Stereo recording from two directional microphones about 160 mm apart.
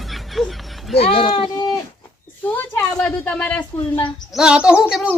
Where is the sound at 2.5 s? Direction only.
10° left (ahead or behind).